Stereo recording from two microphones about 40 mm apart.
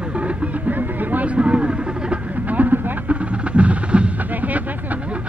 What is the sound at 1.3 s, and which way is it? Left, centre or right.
Vehicle, right.